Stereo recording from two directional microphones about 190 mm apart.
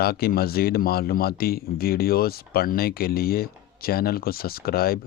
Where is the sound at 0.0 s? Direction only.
55° left (ahead or behind).